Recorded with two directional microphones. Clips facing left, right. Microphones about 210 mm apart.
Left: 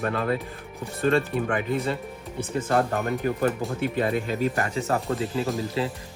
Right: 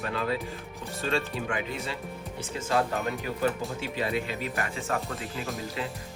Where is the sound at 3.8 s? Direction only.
50° left (ahead or behind).